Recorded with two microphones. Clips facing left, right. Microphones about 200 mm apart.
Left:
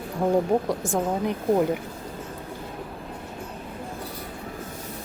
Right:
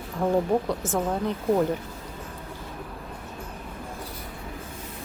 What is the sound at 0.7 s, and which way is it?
A woman's voice, 15° left (ahead or behind).